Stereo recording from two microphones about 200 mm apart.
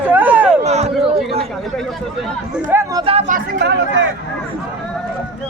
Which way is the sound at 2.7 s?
20° right (ahead or behind).